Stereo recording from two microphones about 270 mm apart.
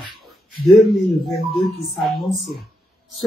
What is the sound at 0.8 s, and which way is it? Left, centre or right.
Speech, centre.